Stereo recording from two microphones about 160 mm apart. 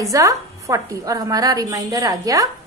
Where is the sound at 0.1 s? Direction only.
20° right (ahead or behind).